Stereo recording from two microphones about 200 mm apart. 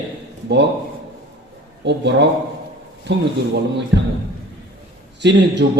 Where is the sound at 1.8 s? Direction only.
60° right (ahead or behind).